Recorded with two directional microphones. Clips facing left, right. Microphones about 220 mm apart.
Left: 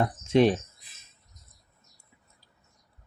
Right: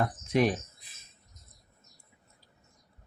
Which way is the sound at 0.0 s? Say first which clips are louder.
Left 5 dB; 25° left (ahead or behind).